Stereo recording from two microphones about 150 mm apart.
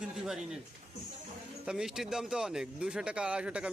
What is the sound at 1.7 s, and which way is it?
Speech, 5° right (ahead or behind).